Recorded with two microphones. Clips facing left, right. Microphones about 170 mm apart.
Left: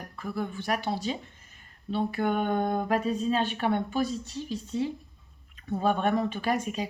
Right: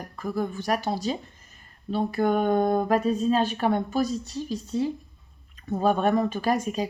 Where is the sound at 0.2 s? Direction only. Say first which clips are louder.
Right 4 dB; 40° right (ahead or behind).